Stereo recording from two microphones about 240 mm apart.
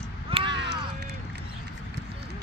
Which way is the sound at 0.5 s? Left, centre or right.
Right.